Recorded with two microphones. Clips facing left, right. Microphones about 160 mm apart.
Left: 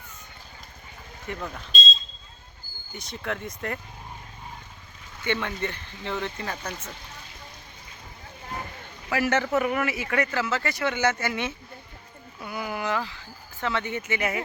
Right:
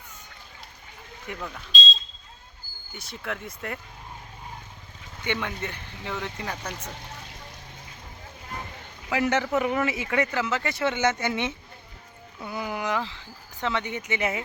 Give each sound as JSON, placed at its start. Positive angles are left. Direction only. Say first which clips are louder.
{"t": 1.3, "sound": "speech", "louder": "left 2 dB", "side_deg": -10}
{"t": 3.0, "sound": "speech", "louder": "left 2 dB", "side_deg": -5}
{"t": 5.2, "sound": "speech", "louder": "left 2 dB", "side_deg": -15}
{"t": 9.0, "sound": "speech", "louder": "even", "side_deg": -15}